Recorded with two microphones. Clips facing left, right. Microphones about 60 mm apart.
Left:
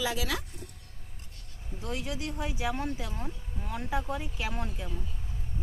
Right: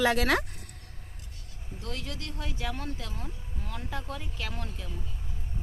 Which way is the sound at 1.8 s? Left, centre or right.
Centre.